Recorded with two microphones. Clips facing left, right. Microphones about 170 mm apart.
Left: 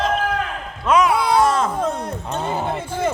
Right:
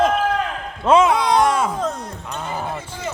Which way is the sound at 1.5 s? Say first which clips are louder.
Even; 10° right (ahead or behind).